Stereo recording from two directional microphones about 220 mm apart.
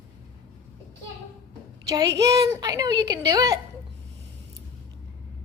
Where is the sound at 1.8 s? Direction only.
15° right (ahead or behind).